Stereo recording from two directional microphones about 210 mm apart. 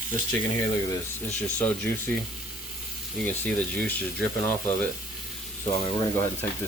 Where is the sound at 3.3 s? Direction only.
10° left (ahead or behind).